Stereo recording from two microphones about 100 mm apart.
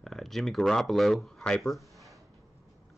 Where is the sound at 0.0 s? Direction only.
5° left (ahead or behind).